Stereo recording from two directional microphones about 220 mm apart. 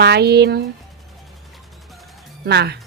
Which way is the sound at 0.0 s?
50° right (ahead or behind).